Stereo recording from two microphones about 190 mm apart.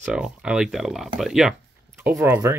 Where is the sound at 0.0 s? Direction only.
5° right (ahead or behind).